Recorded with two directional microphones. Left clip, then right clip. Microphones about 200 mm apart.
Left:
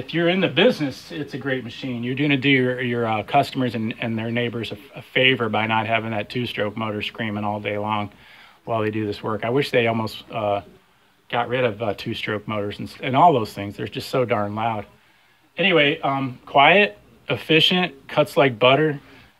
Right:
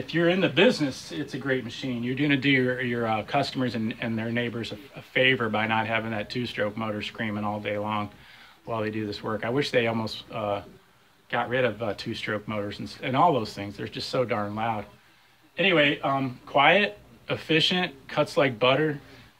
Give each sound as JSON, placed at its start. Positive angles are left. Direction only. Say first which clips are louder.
{"t": 0.0, "sound": "speech", "louder": "left 3 dB", "side_deg": 25}
{"t": 2.0, "sound": "a man's voice", "louder": "left 5 dB", "side_deg": 35}